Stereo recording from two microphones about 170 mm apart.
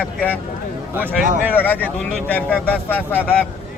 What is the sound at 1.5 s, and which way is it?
Speech, 10° left (ahead or behind).